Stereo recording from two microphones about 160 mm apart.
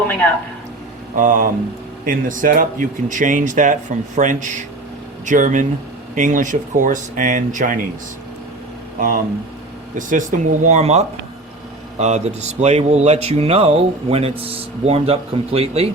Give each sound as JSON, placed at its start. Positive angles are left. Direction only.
{"t": 1.1, "sound": "speech", "side_deg": -55}
{"t": 9.0, "sound": "speech", "side_deg": -60}